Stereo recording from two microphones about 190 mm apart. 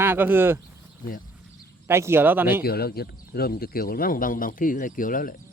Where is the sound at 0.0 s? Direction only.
10° right (ahead or behind).